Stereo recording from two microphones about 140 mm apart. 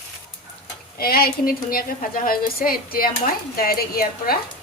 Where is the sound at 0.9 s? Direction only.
90° left.